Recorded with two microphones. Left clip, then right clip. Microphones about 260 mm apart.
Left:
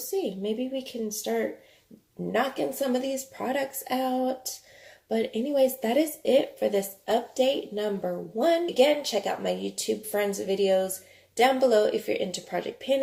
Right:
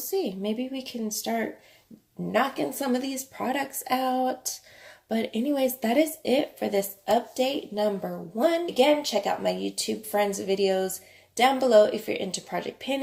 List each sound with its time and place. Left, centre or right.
0.2 s speech: right